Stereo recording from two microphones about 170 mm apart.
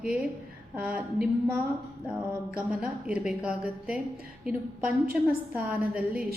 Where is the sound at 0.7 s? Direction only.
10° right (ahead or behind).